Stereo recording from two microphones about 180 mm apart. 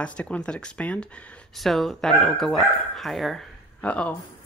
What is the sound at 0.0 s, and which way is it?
Speech, 5° left (ahead or behind).